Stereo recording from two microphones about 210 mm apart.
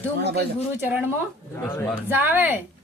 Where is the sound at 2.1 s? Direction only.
10° right (ahead or behind).